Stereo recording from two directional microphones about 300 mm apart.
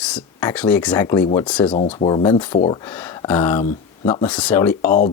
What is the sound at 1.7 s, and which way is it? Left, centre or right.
Speech, centre.